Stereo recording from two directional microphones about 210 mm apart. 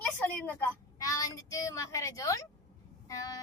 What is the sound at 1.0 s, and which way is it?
A child's voice, 15° left (ahead or behind).